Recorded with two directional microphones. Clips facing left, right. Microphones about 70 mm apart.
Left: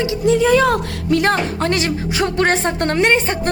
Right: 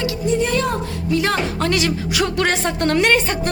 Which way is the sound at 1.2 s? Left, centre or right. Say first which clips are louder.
Left 3 dB; left.